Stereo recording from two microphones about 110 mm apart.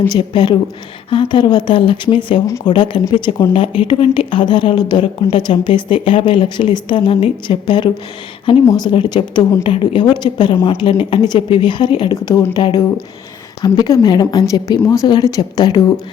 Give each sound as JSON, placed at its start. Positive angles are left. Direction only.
{"t": 0.1, "sound": "a woman's voice", "side_deg": 45}
{"t": 12.1, "sound": "speech", "side_deg": 30}
{"t": 12.5, "sound": "a woman's voice", "side_deg": 50}
{"t": 13.6, "sound": "speech", "side_deg": 40}